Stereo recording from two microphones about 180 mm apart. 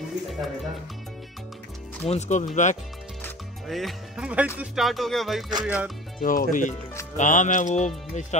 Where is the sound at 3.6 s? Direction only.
Centre (ahead or behind).